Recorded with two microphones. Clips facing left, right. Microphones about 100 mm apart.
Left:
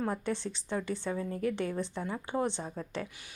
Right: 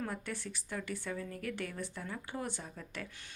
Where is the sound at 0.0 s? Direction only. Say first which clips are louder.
Left 7 dB; 25° left (ahead or behind).